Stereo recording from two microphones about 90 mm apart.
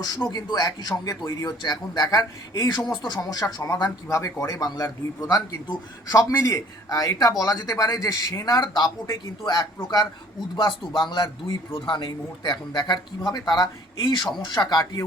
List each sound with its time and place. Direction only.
0.0 s speech: 50° left (ahead or behind)
2.9 s a man's voice: 55° left (ahead or behind)
5.6 s speech: 50° left (ahead or behind)
10.5 s speech: 60° left (ahead or behind)